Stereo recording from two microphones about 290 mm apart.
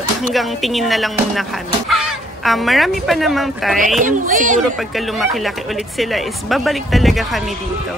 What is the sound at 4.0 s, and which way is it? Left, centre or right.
Speech, right.